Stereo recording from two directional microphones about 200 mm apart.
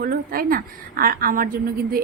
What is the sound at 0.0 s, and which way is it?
A woman's voice, 45° right (ahead or behind).